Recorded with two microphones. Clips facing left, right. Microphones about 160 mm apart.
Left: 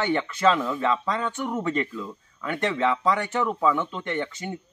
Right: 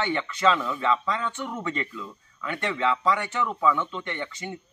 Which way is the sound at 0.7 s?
45° left (ahead or behind).